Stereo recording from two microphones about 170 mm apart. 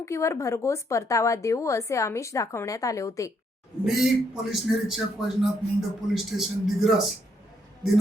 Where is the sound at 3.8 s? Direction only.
5° right (ahead or behind).